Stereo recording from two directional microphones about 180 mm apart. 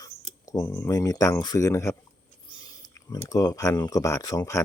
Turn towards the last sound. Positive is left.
turn(degrees=20)  # may be behind; listen again after turning